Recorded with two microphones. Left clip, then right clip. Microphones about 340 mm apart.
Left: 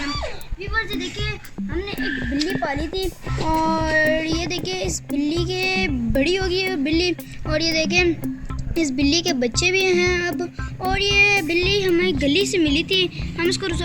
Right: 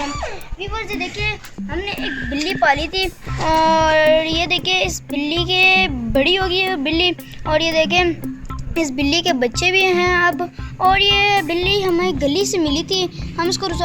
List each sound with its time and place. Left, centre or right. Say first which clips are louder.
0.8 s a woman's voice: right 1 dB; centre
1.9 s music: right 1 dB; right
10.8 s a woman's voice: right 4 dB; right